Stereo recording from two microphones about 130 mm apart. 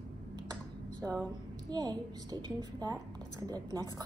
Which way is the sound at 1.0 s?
10° left (ahead or behind).